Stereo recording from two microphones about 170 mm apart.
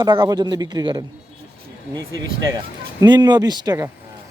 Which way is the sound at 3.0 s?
25° right (ahead or behind).